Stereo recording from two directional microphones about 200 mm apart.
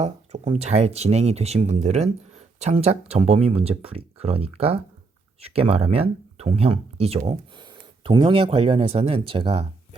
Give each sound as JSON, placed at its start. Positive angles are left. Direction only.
{"t": 0.0, "sound": "speech", "side_deg": -35}